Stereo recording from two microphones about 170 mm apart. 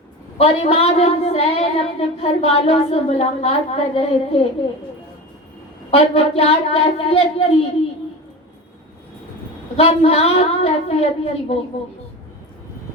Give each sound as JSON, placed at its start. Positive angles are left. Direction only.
{"t": 0.3, "sound": "child singing", "side_deg": 35}
{"t": 5.9, "sound": "child singing", "side_deg": 35}
{"t": 9.7, "sound": "child singing", "side_deg": 35}